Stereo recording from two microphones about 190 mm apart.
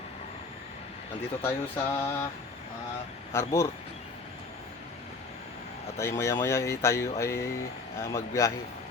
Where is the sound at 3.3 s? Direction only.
15° left (ahead or behind).